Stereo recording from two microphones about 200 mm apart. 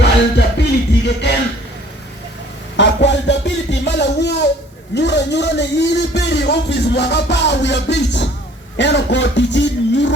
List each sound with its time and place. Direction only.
0.0 s music: 55° left (ahead or behind)
2.7 s a sound: 60° left (ahead or behind)
4.9 s a man's voice: 60° left (ahead or behind)